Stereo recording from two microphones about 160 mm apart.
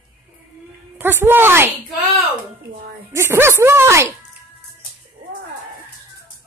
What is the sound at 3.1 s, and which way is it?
Speech, 15° right (ahead or behind).